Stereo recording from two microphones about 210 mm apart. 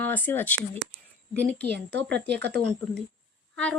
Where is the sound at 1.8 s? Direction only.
55° right (ahead or behind).